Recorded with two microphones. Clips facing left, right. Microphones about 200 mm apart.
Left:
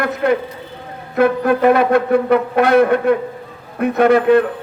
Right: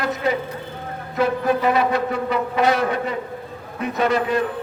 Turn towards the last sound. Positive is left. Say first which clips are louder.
# left 9 dB
turn(degrees=60)  # may be behind; listen again after turning